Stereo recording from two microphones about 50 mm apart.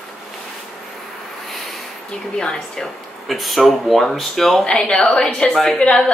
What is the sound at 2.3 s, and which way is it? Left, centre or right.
Speech, centre.